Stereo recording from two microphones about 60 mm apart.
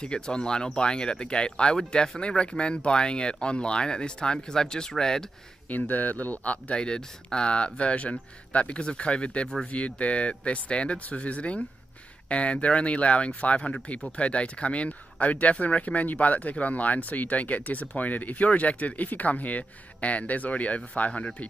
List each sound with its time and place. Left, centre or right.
0.0 s speech: centre
5.7 s speech: left